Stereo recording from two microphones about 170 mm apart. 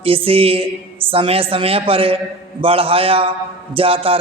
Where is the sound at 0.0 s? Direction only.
35° right (ahead or behind).